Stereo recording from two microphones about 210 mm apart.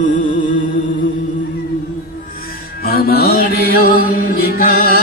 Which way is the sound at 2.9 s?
45° left (ahead or behind).